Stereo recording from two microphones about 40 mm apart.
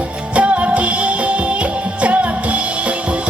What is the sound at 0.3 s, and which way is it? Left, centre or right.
Music, right.